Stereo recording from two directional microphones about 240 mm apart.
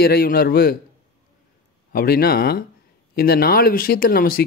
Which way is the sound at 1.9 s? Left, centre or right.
Left.